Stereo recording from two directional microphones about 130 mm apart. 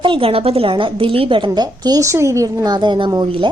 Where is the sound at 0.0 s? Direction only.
45° right (ahead or behind); by 2.7 s 25° right (ahead or behind).